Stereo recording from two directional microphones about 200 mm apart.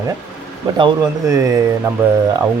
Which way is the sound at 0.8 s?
15° right (ahead or behind).